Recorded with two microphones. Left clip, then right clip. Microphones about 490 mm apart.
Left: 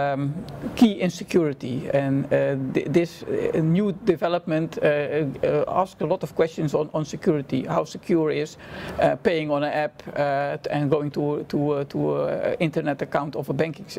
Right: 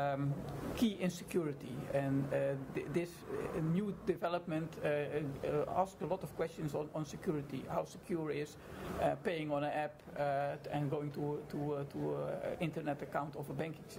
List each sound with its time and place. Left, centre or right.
0.0 s speech: left